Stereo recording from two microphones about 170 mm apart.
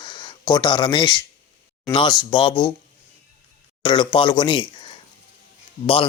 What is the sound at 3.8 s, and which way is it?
Speech, 25° left (ahead or behind).